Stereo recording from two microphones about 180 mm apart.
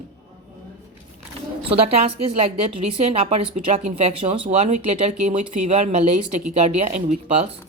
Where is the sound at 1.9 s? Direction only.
35° right (ahead or behind).